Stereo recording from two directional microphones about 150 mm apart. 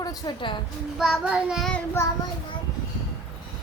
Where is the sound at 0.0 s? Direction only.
25° left (ahead or behind).